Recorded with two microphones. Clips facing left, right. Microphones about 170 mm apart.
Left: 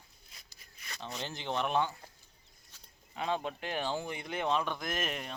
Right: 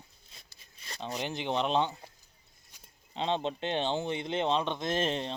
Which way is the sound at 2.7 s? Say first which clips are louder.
Right 2 dB; 15° right (ahead or behind).